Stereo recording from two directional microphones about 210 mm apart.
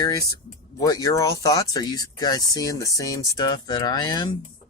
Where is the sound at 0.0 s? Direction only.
15° left (ahead or behind).